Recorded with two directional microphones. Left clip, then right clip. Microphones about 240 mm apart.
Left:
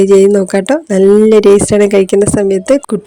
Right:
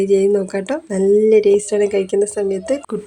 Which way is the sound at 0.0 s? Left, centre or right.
Left.